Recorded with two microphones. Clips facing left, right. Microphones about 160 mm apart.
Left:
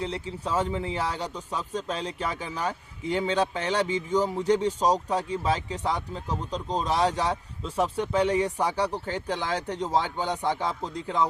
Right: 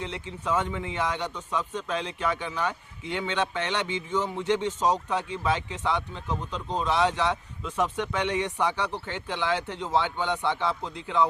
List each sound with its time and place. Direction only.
0.0 s speech: 35° left (ahead or behind)